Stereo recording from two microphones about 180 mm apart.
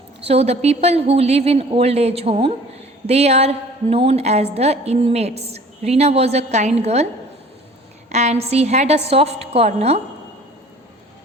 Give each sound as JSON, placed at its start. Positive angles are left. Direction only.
{"t": 0.3, "sound": "a woman's voice", "side_deg": -35}
{"t": 8.1, "sound": "a woman's voice", "side_deg": -40}